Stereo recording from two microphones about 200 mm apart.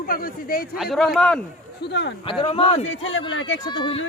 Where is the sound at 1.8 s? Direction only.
60° left (ahead or behind).